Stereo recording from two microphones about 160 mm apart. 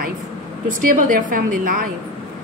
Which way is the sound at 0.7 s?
55° right (ahead or behind).